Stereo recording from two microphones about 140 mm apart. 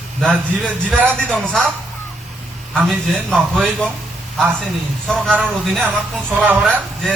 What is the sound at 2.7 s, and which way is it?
A man's voice, 5° left (ahead or behind).